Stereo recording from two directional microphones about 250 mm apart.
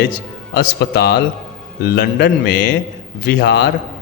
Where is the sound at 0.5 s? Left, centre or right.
Left.